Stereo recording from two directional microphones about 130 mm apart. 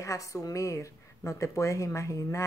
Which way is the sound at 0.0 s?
25° left (ahead or behind).